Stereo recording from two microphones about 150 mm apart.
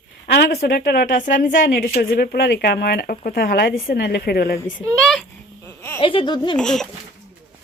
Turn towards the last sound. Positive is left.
turn(degrees=5)  # may be behind; listen again after turning